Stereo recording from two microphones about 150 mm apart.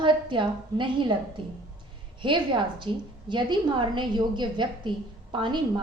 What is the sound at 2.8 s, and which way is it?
A woman's voice, 30° right (ahead or behind).